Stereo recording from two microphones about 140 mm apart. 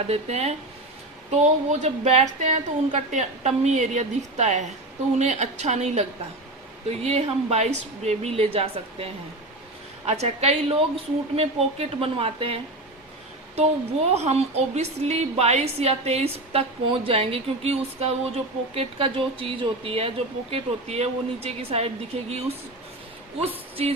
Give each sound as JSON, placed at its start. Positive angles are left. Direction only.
{"t": 0.1, "sound": "a woman's voice", "side_deg": -50}
{"t": 10.1, "sound": "a woman's voice", "side_deg": -50}
{"t": 14.1, "sound": "a woman's voice", "side_deg": -50}